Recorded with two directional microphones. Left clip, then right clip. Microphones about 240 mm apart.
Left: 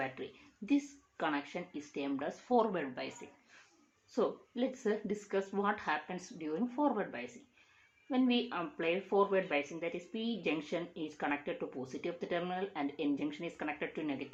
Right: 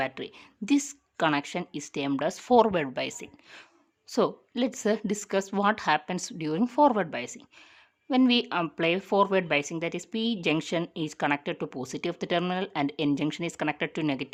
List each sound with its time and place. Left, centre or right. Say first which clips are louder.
0.0 s speech: right 8 dB; right